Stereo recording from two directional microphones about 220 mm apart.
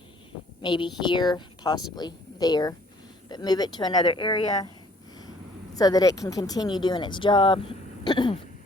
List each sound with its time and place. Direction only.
0.6 s speech: 20° left (ahead or behind)
5.7 s speech: 15° left (ahead or behind)